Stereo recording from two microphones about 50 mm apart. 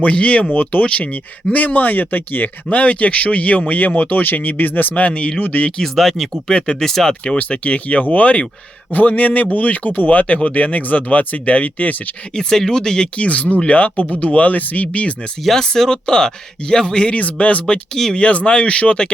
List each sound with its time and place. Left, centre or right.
0.0 s speech: left
2.6 s speech: left
5.7 s speech: centre
6.5 s speech: centre
6.8 s speech: centre
7.1 s speech: left
12.3 s speech: centre
13.1 s speech: left
15.4 s speech: centre
17.1 s speech: left
17.9 s speech: centre
18.2 s speech: left